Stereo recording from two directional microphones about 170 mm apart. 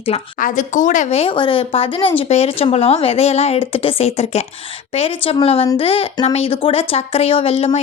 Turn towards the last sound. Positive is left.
turn(degrees=35)  # may be behind; listen again after turning